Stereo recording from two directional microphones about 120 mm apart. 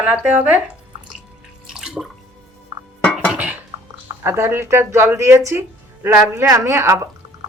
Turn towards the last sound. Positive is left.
turn(degrees=-20)  # may be behind; listen again after turning